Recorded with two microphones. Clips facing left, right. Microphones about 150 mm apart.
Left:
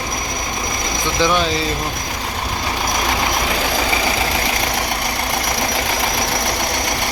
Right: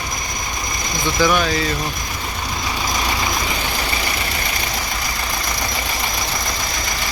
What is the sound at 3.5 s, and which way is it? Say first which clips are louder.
Vehicle: left 5 dB; 90° left.